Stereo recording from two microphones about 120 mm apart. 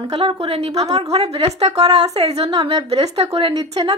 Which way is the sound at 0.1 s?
50° right (ahead or behind).